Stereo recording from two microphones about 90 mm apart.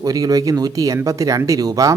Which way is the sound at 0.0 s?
40° right (ahead or behind).